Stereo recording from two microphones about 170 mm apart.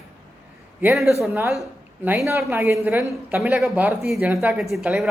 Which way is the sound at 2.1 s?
15° right (ahead or behind).